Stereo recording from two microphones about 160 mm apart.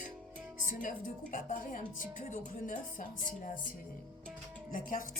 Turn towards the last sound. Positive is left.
turn(degrees=55)  # may be behind; listen again after turning